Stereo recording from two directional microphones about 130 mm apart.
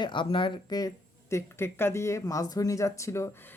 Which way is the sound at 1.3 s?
20° left (ahead or behind).